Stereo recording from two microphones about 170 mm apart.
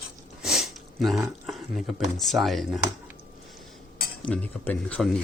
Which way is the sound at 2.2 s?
Centre (ahead or behind).